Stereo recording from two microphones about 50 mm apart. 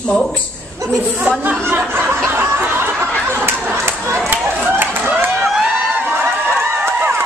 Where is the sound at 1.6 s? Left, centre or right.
Right.